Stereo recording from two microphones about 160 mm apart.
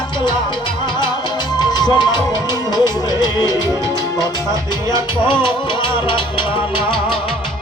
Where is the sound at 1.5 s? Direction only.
25° left (ahead or behind).